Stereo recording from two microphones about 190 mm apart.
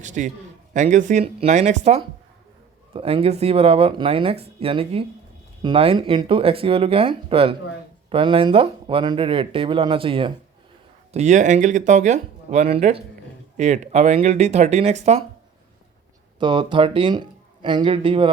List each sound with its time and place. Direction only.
0.0 s speech: 40° right (ahead or behind)
16.4 s speech: 25° right (ahead or behind)